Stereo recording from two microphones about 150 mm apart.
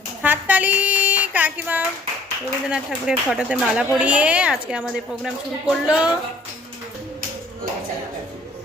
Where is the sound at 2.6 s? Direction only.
5° right (ahead or behind).